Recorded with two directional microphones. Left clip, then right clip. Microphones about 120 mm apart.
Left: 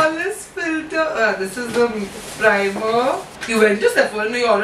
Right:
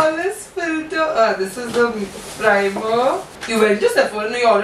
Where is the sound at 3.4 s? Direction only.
15° right (ahead or behind).